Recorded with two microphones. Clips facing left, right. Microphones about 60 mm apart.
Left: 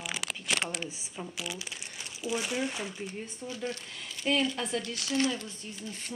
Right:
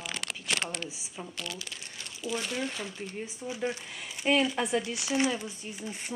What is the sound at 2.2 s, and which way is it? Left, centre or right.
Speech, centre.